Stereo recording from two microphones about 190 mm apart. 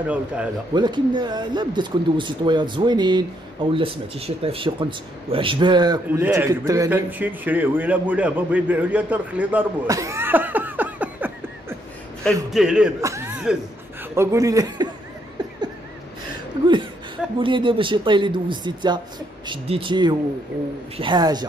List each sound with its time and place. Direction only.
0.0 s a man's voice: 5° right (ahead or behind)
0.7 s speech: 25° right (ahead or behind)
6.0 s a man's voice: 10° right (ahead or behind)
12.4 s a man's voice: 5° right (ahead or behind)
13.0 s music: 15° right (ahead or behind)
13.3 s a sound: 5° right (ahead or behind)
14.1 s a man's voice: 15° right (ahead or behind)
17.4 s speech: 25° right (ahead or behind)